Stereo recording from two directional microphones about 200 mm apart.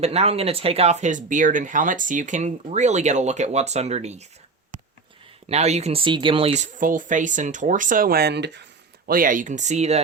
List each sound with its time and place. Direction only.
0.0 s speech: 30° right (ahead or behind)
5.5 s speech: 35° right (ahead or behind); by 8.6 s 60° right (ahead or behind)
9.0 s speech: 45° right (ahead or behind)